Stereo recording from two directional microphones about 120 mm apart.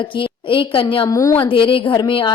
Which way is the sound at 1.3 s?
45° left (ahead or behind).